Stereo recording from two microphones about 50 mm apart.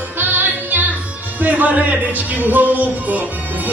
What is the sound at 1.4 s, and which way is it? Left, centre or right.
Speech, right.